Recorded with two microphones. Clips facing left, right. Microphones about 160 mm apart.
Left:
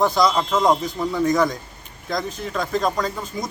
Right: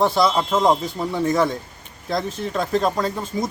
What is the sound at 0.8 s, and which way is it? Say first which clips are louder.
Speech: left 1 dB; 25° right (ahead or behind).